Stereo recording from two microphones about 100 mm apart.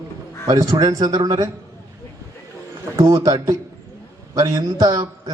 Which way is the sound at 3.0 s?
35° right (ahead or behind).